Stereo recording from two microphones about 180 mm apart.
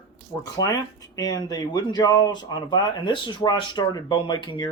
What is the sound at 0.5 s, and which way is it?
Speech, 20° left (ahead or behind).